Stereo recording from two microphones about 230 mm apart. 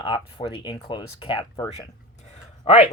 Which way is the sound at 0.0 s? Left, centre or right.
Centre.